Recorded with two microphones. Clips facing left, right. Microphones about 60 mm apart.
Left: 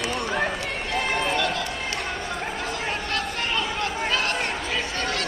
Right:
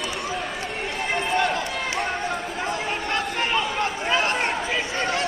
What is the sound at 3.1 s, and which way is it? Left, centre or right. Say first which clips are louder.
Chatter: right 5 dB; right.